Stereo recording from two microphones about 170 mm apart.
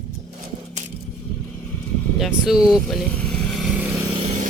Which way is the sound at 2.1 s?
Centre (ahead or behind).